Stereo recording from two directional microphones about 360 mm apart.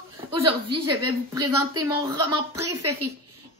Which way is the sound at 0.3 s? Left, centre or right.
Centre.